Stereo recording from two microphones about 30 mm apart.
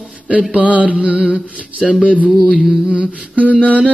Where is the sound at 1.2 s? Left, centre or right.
Right.